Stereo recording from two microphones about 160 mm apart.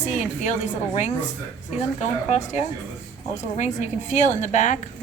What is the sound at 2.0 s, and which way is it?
A woman's voice, 45° left (ahead or behind).